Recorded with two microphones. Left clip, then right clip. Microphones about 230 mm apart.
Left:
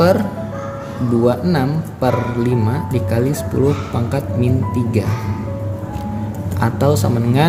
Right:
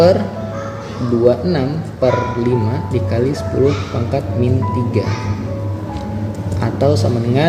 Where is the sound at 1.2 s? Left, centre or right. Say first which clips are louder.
Right 3 dB; left.